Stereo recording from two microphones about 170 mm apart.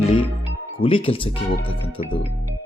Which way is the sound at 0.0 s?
35° left (ahead or behind).